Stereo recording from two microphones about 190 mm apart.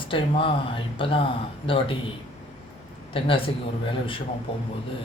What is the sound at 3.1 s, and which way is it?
Speech, 30° left (ahead or behind).